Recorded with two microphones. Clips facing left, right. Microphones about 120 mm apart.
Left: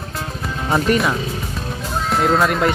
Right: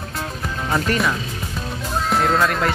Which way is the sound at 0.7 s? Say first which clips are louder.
Left 4 dB; 25° left (ahead or behind).